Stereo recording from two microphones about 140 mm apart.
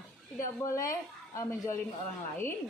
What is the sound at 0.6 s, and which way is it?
Speech, 20° left (ahead or behind).